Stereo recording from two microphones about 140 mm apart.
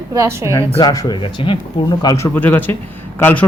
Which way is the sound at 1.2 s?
35° left (ahead or behind).